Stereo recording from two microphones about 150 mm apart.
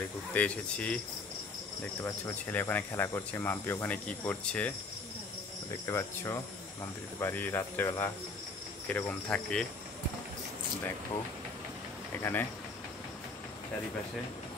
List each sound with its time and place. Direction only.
0.3 s speech: 10° left (ahead or behind)
2.0 s speech: 15° left (ahead or behind)
5.9 s speech: 20° left (ahead or behind)
12.2 s speech: 15° left (ahead or behind)